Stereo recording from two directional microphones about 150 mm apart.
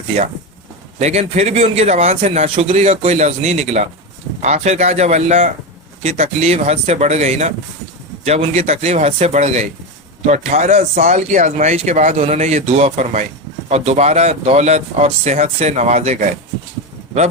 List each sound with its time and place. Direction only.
0.9 s a man's voice: 45° right (ahead or behind)